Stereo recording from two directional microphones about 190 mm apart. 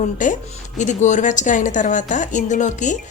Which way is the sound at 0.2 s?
45° left (ahead or behind).